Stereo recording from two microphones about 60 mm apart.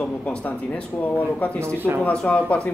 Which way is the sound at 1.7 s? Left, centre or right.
Right.